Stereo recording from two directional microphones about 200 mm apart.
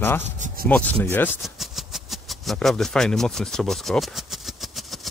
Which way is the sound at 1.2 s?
Centre (ahead or behind).